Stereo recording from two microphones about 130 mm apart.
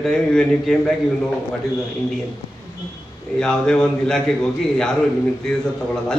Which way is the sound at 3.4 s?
5° left (ahead or behind).